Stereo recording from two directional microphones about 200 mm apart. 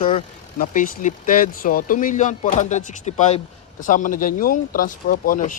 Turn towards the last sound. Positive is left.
turn(degrees=40)  # may be behind; listen again after turning